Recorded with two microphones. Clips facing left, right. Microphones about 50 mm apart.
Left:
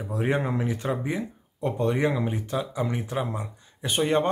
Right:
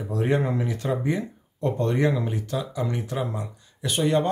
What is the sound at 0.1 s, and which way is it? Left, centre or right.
Speech, centre.